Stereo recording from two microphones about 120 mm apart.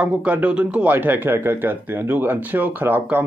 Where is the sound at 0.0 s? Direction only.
10° right (ahead or behind).